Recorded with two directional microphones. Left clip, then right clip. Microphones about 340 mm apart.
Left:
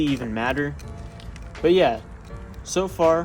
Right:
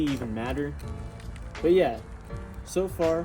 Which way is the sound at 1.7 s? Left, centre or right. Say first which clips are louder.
Left 4 dB; centre.